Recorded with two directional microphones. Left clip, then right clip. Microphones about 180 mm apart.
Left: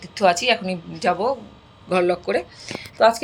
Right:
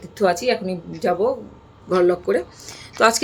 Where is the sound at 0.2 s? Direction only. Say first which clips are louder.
Left 1 dB; 5° right (ahead or behind).